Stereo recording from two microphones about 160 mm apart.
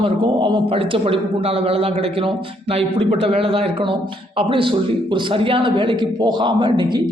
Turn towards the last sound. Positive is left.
turn(degrees=-30)  # may be behind; listen again after turning